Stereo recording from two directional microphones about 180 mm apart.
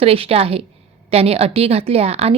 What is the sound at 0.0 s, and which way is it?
A woman's voice, 35° right (ahead or behind).